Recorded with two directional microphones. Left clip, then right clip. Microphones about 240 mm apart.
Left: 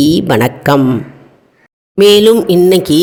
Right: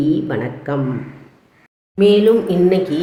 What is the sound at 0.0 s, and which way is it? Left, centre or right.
Speech, left.